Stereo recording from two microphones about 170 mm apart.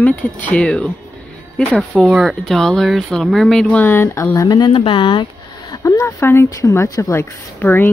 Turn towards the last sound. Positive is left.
turn(degrees=15)  # may be behind; listen again after turning